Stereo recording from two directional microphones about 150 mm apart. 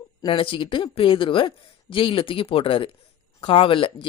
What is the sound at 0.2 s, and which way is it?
Speech, 35° left (ahead or behind).